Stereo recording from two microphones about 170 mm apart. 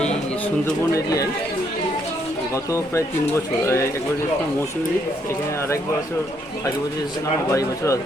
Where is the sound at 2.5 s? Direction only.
20° left (ahead or behind).